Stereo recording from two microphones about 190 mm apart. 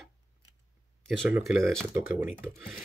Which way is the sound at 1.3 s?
Centre (ahead or behind).